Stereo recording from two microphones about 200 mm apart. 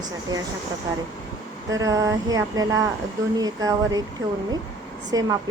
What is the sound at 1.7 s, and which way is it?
A woman's voice, 15° right (ahead or behind).